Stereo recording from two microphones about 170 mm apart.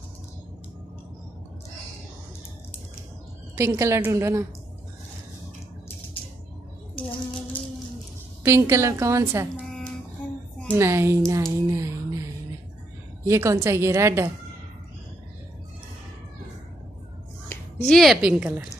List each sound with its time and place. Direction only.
3.5 s a woman's voice: 15° right (ahead or behind)
7.0 s music: 10° left (ahead or behind)
8.5 s a woman's voice: 15° right (ahead or behind)
9.6 s a sound: centre (ahead or behind)
10.7 s a woman's voice: 15° right (ahead or behind)
11.7 s a sound: 15° right (ahead or behind)
13.3 s a woman's voice: 15° right (ahead or behind)
17.5 s speech: 5° left (ahead or behind)